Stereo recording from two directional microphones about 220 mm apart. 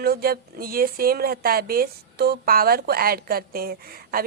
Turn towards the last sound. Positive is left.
turn(degrees=-45)  # may be behind; listen again after turning